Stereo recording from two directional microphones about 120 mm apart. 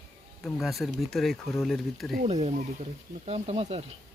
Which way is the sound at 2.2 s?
65° right (ahead or behind).